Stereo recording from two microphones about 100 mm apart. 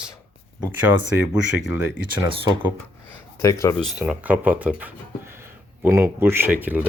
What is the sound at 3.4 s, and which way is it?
Speech, 30° left (ahead or behind).